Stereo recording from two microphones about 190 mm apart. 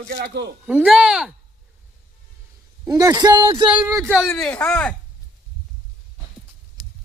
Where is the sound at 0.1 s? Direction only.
55° right (ahead or behind).